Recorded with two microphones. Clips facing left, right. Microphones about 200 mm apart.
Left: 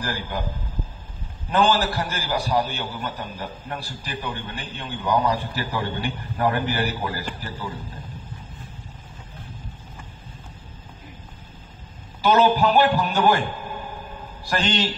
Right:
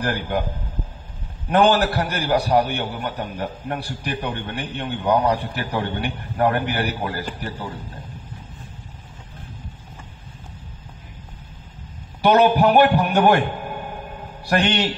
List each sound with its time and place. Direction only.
0.0 s a man's voice: 60° right (ahead or behind)
1.5 s a man's voice: 65° right (ahead or behind)
12.2 s a man's voice: 65° right (ahead or behind)
14.4 s a man's voice: 65° right (ahead or behind)